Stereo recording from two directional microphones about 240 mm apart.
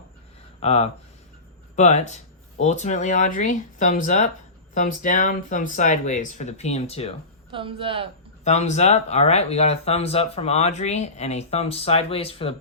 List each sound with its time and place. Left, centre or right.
0.6 s speech: left
7.5 s speech: right
8.4 s speech: left